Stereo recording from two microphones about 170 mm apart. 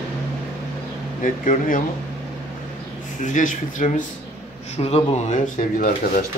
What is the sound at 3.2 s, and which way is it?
Speech, 50° left (ahead or behind).